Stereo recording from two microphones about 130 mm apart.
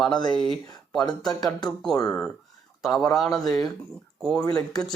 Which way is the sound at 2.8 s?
Centre (ahead or behind).